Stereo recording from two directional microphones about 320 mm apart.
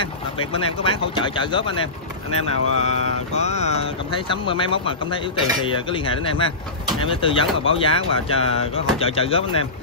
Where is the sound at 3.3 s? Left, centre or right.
Left.